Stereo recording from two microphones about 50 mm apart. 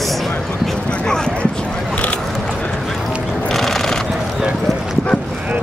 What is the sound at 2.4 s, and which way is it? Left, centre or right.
Clip-clop, centre.